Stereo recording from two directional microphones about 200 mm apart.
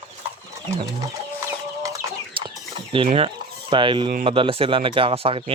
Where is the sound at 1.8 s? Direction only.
15° right (ahead or behind).